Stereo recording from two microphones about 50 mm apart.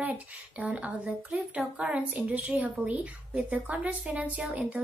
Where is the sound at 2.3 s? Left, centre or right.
Right.